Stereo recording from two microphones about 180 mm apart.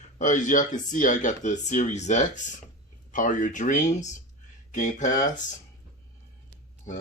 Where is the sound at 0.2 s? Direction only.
45° left (ahead or behind).